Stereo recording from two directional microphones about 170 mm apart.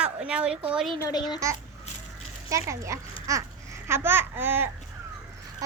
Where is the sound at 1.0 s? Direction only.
25° left (ahead or behind).